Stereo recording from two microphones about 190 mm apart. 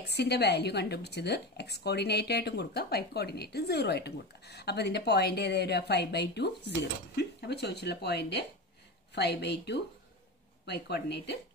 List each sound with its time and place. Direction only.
0.0 s a woman's voice: 60° left (ahead or behind)